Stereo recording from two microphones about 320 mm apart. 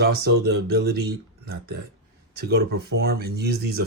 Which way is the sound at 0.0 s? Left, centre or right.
Right.